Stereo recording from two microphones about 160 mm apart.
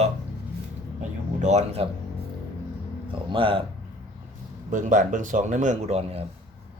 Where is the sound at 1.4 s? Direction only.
45° right (ahead or behind).